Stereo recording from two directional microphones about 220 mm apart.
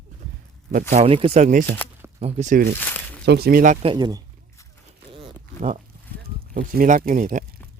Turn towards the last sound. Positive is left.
turn(degrees=-40)  # may be behind; listen again after turning